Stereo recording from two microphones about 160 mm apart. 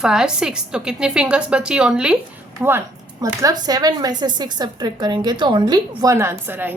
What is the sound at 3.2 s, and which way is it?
A woman's voice, 25° right (ahead or behind).